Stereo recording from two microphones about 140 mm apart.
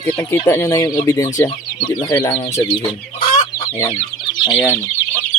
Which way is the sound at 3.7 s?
20° left (ahead or behind).